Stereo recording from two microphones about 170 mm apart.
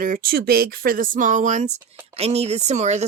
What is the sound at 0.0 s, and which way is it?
Speech, 60° right (ahead or behind).